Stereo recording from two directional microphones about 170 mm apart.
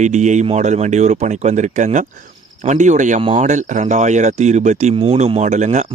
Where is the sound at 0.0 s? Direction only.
45° right (ahead or behind).